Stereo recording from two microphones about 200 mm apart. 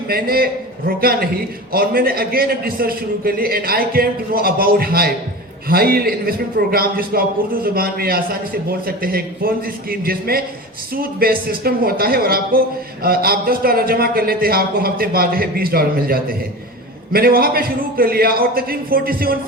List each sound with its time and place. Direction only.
0.1 s a man's voice: 50° right (ahead or behind)